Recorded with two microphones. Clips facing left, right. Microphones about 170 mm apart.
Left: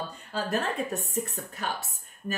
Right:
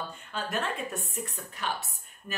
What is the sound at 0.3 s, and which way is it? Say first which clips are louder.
Speech: left 3 dB; 35° left (ahead or behind).